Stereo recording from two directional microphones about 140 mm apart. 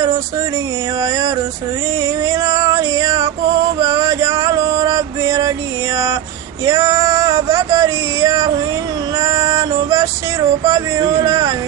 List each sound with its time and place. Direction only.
2.2 s music: 25° right (ahead or behind)
3.8 s male singing: 25° right (ahead or behind)
6.6 s a sound: 25° right (ahead or behind)
9.2 s female singing: 30° right (ahead or behind)
10.6 s music: 30° right (ahead or behind)